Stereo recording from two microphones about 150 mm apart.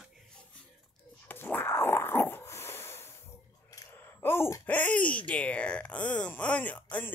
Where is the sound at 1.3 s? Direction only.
15° left (ahead or behind).